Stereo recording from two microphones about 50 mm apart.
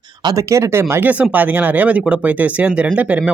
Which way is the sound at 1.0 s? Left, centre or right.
Right.